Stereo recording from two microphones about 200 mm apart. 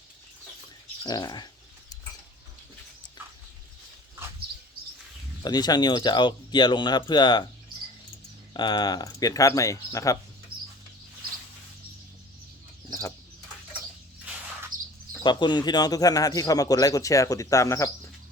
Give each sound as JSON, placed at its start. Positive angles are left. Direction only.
{"t": 1.0, "sound": "speech", "side_deg": 20}
{"t": 5.4, "sound": "speech", "side_deg": 20}
{"t": 8.5, "sound": "speech", "side_deg": 20}
{"t": 14.7, "sound": "bird", "side_deg": -45}
{"t": 15.2, "sound": "speech", "side_deg": 20}